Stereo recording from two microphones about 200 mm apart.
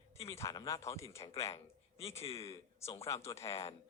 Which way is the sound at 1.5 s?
30° left (ahead or behind).